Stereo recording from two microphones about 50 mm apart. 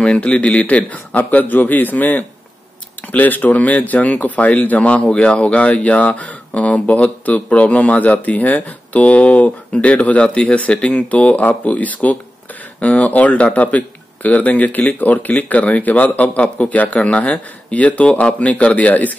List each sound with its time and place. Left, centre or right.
0.0 s a man's voice: left
10.2 s speech: centre